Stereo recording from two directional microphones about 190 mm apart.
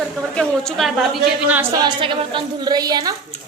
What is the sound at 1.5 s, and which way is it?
A woman's voice, 10° right (ahead or behind).